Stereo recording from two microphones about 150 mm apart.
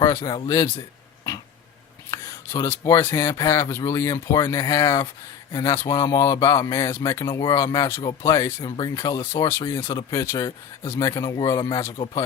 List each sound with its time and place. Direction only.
0.4 s speech: 20° left (ahead or behind)
2.0 s a sound: 30° left (ahead or behind)
2.6 s speech: 20° left (ahead or behind)
8.6 s speech: 30° left (ahead or behind)